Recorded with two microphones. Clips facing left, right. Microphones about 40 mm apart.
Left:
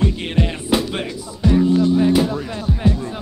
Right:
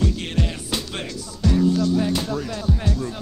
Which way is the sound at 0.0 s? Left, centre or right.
Left.